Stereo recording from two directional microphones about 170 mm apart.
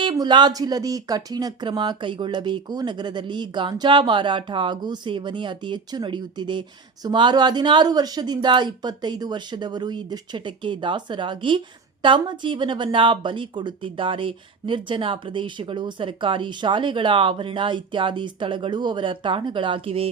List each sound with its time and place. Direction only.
0.0 s speech: 25° right (ahead or behind)